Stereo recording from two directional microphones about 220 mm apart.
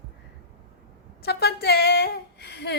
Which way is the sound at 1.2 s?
45° left (ahead or behind).